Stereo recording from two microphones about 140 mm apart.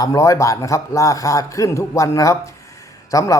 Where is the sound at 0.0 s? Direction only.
25° left (ahead or behind).